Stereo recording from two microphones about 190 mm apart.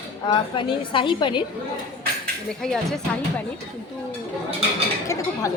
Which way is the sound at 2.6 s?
Centre (ahead or behind).